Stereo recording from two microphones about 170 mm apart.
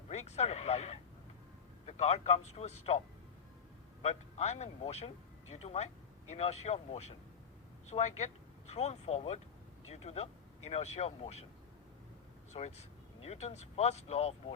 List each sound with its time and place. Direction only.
0.1 s speech: 40° left (ahead or behind)
4.0 s speech: 40° left (ahead or behind)
12.5 s speech: 35° left (ahead or behind)